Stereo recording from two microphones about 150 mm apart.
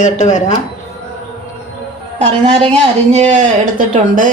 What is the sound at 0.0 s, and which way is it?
Speech, 55° left (ahead or behind).